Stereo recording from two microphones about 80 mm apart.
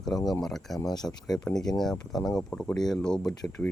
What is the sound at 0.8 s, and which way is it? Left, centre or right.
Speech, left.